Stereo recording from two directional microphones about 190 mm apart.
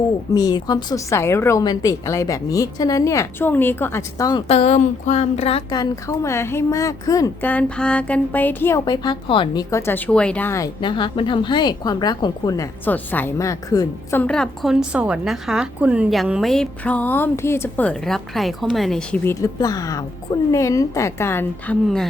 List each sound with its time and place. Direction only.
0.3 s speech: 20° left (ahead or behind)
4.4 s speech: 35° left (ahead or behind)
5.8 s speech: 15° left (ahead or behind)